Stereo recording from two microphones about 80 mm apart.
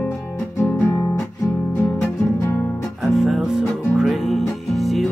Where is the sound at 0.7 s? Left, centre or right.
Left.